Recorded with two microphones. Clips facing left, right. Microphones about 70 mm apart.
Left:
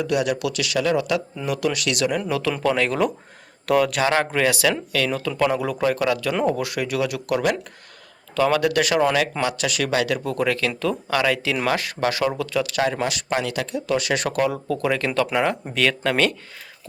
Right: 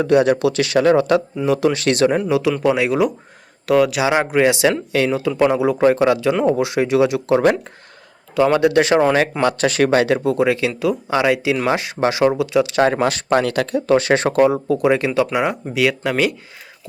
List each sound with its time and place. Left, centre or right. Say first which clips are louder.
0.0 s speech: right 8 dB; right
2.3 s speech: right 5 dB; centre
4.1 s speech: right 5 dB; centre
9.4 s speech: right 7 dB; right
10.2 s speech: right 6 dB; centre
12.8 s speech: right 6 dB; right; by 16.3 s centre